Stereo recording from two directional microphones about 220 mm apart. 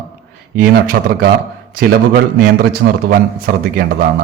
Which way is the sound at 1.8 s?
45° right (ahead or behind).